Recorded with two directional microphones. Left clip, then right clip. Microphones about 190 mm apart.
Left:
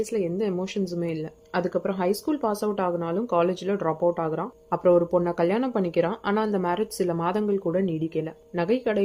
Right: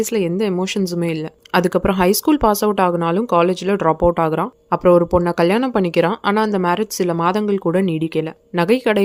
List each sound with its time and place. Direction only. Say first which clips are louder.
0.0 s speech: right 7 dB; 40° right (ahead or behind)